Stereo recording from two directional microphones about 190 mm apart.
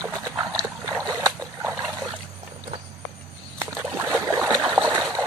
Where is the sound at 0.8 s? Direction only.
20° right (ahead or behind).